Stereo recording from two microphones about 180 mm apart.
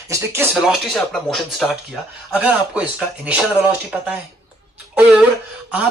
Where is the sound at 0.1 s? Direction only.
15° right (ahead or behind).